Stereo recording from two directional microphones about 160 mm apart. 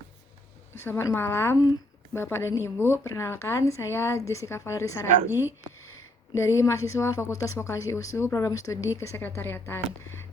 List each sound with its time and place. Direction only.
0.9 s speech: 15° left (ahead or behind)